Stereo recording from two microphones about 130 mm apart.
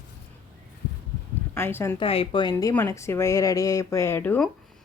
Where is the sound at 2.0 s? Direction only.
45° left (ahead or behind).